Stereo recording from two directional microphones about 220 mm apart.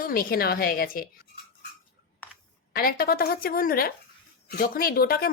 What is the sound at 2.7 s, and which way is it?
A woman's voice, 40° left (ahead or behind).